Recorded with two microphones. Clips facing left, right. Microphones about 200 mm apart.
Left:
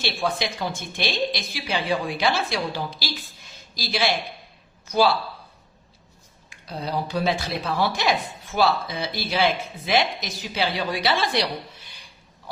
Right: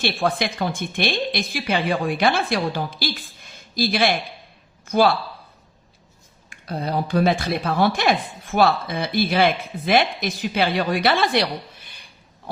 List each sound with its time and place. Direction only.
0.0 s a woman's voice: 55° right (ahead or behind)
6.5 s speech: 55° right (ahead or behind)